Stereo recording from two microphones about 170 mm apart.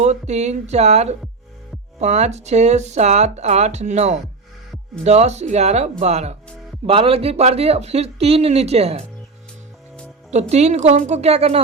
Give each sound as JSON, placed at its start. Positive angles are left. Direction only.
{"t": 0.0, "sound": "speech", "side_deg": -40}
{"t": 10.5, "sound": "speech", "side_deg": -40}